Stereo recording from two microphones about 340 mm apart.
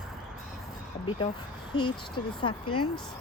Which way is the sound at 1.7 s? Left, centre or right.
Centre.